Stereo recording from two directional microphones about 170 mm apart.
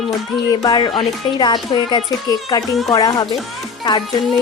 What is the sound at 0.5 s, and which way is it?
Speech, 25° left (ahead or behind).